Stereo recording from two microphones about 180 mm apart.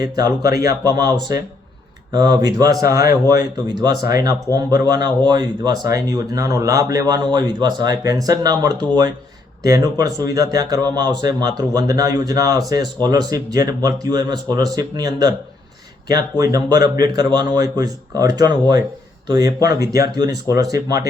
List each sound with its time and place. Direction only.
0.0 s speech: 20° right (ahead or behind)